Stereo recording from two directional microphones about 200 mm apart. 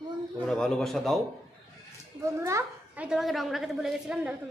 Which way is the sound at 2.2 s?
15° right (ahead or behind).